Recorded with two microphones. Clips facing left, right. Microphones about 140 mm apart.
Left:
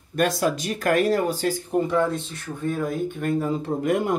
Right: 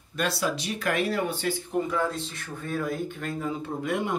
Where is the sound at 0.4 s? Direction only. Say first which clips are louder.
Left 5 dB; 50° left (ahead or behind).